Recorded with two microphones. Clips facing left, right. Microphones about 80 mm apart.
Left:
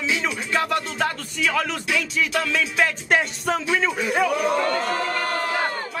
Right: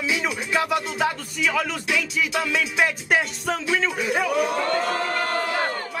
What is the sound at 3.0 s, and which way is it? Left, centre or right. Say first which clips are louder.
Speech: left 1 dB; centre.